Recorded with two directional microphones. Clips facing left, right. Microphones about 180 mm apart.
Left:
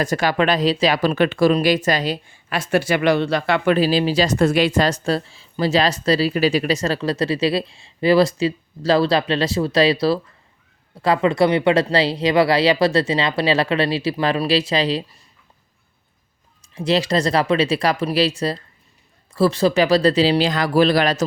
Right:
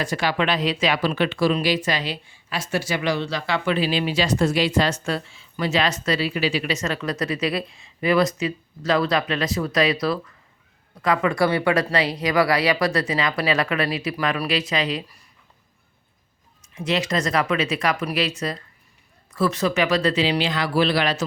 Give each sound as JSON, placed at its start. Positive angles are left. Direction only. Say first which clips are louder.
{"t": 0.0, "sound": "speech", "louder": "left 4 dB", "side_deg": 45}
{"t": 4.4, "sound": "a woman's voice", "louder": "left 3 dB", "side_deg": 55}
{"t": 16.7, "sound": "a woman's voice", "louder": "left 5 dB", "side_deg": 35}